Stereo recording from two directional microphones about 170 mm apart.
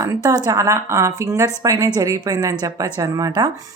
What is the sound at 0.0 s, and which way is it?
A woman's voice, 20° right (ahead or behind).